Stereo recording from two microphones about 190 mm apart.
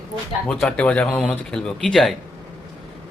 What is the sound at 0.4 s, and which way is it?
Speech, 5° left (ahead or behind).